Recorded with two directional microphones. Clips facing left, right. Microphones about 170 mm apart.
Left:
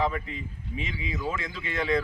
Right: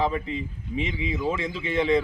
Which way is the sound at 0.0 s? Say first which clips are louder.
Right 3 dB; 25° right (ahead or behind).